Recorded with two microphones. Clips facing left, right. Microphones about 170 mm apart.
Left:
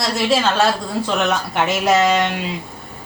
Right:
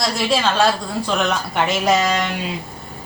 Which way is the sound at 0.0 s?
Centre (ahead or behind).